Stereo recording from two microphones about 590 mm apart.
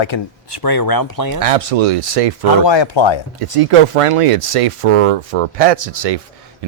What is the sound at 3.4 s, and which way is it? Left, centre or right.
Speech, right.